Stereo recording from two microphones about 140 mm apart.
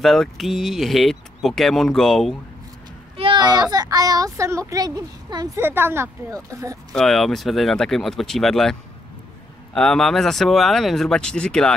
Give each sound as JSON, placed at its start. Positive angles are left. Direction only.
{"t": 0.0, "sound": "speech", "side_deg": 0}
{"t": 3.2, "sound": "a sound", "side_deg": -35}
{"t": 3.7, "sound": "a woman's voice", "side_deg": -25}
{"t": 5.6, "sound": "speech", "side_deg": -15}
{"t": 6.9, "sound": "speech", "side_deg": 0}
{"t": 9.8, "sound": "speech", "side_deg": 5}